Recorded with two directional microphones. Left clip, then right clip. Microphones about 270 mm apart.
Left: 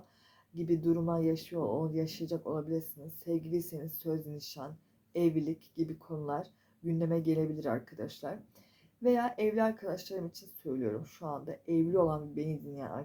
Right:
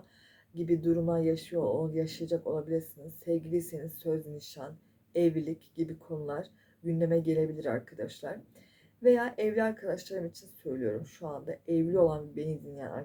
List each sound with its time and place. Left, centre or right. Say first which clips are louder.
0.5 s speech: right 2 dB; left